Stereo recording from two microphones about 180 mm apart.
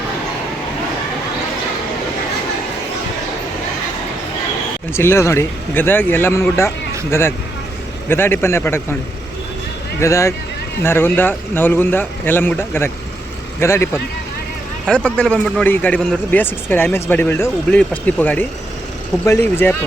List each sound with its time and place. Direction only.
4.9 s a man's voice: 15° left (ahead or behind)
10.0 s a man's voice: 15° left (ahead or behind)